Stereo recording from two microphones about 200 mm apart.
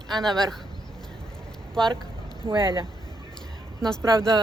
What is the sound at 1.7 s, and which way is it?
Speech, 5° left (ahead or behind).